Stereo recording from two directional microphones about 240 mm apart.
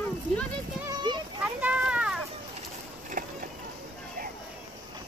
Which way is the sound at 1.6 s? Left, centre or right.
Centre.